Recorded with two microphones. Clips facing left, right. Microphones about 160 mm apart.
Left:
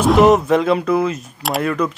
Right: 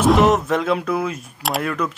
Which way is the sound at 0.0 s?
Centre (ahead or behind).